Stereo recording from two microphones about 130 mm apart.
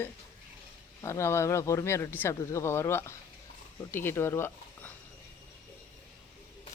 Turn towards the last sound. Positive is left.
turn(degrees=20)  # may be behind; listen again after turning